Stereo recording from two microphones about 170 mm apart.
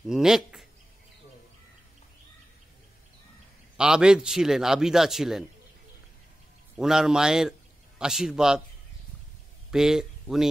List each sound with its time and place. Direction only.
0.0 s a sound: 5° right (ahead or behind)
3.7 s speech: 5° right (ahead or behind)
6.8 s speech: 5° right (ahead or behind)
9.7 s speech: 5° right (ahead or behind)